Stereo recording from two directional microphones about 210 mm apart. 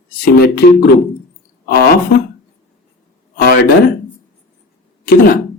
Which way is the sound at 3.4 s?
45° left (ahead or behind).